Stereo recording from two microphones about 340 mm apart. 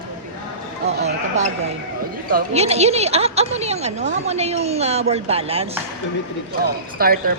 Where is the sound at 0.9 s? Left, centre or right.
Right.